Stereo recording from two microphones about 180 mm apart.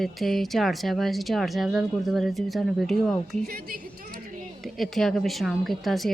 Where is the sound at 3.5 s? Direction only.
55° right (ahead or behind).